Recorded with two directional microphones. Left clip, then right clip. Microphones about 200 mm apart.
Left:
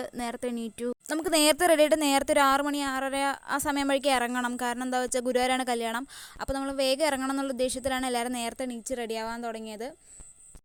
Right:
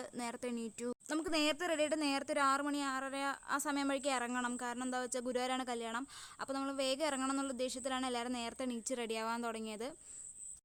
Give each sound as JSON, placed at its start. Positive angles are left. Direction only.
{"t": 0.0, "sound": "speech", "side_deg": 30}